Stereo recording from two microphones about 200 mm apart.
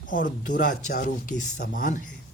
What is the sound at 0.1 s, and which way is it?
Speech, 40° left (ahead or behind).